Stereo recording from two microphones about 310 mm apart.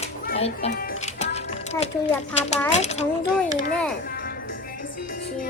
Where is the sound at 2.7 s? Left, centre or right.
Left.